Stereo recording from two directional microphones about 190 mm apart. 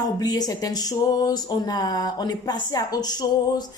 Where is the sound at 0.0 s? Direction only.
20° left (ahead or behind).